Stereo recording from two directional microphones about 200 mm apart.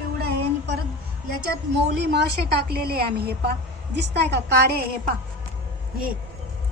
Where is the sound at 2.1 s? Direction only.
55° right (ahead or behind).